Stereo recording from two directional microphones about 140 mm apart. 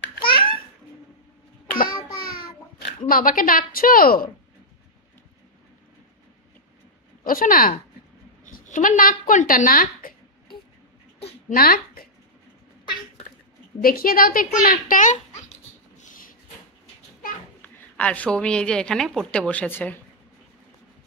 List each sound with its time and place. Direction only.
0.3 s babbling: 35° left (ahead or behind)
3.1 s a woman's voice: 90° left
7.2 s a woman's voice: 90° left
8.5 s a woman's voice: 65° left (ahead or behind)
9.3 s speech: 65° left (ahead or behind); by 10.1 s 90° left
11.4 s speech: 90° left
13.8 s a woman's voice: 90° left; by 15.2 s 65° left (ahead or behind)
16.0 s a sound: 75° left (ahead or behind)
17.6 s a woman's voice: 10° left (ahead or behind)